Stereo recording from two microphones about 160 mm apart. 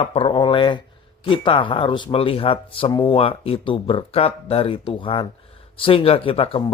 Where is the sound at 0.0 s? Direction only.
35° left (ahead or behind).